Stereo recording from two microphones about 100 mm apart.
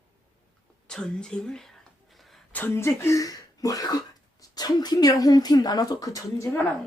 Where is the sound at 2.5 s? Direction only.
20° left (ahead or behind).